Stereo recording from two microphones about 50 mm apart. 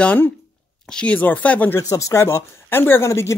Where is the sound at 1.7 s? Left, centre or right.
Left.